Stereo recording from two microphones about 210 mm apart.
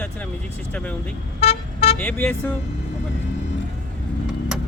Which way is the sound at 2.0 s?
5° left (ahead or behind).